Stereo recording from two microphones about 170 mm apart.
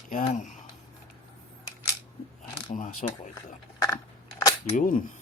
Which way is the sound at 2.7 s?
50° left (ahead or behind).